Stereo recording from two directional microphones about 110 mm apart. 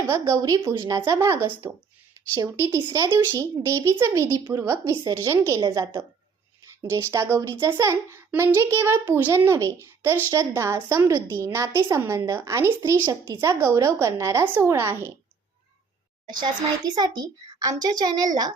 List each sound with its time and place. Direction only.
0.1 s speech: 30° right (ahead or behind)
2.3 s a child's voice: 40° right (ahead or behind)
5.5 s a child's voice: 40° right (ahead or behind)
6.9 s speech: 30° right (ahead or behind)
16.3 s a child's voice: 40° right (ahead or behind)